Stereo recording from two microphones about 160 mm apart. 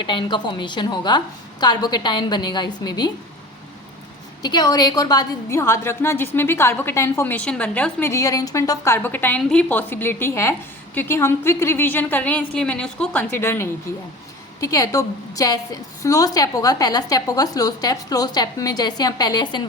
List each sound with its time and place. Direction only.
0.0 s a woman's voice: 30° left (ahead or behind)
4.4 s a woman's voice: 25° left (ahead or behind)